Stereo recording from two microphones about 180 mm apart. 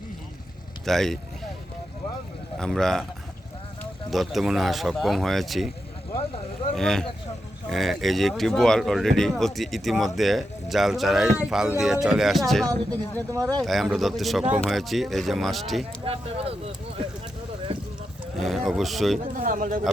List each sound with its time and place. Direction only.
0.9 s speech: centre (ahead or behind)
2.6 s speech: 5° left (ahead or behind)
4.1 s speech: centre (ahead or behind)
6.7 s speech: 5° left (ahead or behind)
13.3 s speech: 20° right (ahead or behind)
13.6 s speech: centre (ahead or behind)
16.0 s speech: 30° right (ahead or behind)
18.3 s speech: centre (ahead or behind)
19.2 s speech: 50° right (ahead or behind)